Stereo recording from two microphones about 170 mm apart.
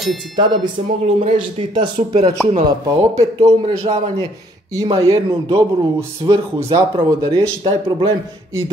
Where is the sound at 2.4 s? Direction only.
40° right (ahead or behind).